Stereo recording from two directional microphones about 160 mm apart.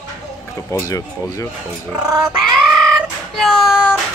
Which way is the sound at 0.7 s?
20° left (ahead or behind).